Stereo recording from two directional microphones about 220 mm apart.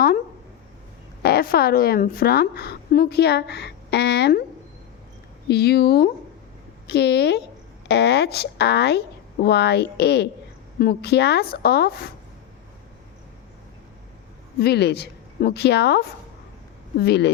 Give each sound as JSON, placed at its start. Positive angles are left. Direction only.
{"t": 1.2, "sound": "a woman's voice", "side_deg": 45}
{"t": 5.5, "sound": "a woman's voice", "side_deg": 45}
{"t": 14.6, "sound": "a woman's voice", "side_deg": 50}